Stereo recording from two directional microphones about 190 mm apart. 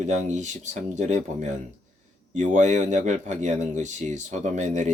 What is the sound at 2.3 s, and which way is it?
Speech, 40° right (ahead or behind).